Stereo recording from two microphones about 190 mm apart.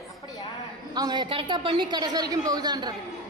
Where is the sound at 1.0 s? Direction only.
20° right (ahead or behind).